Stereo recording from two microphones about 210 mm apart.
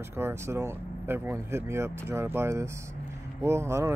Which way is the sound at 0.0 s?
10° right (ahead or behind).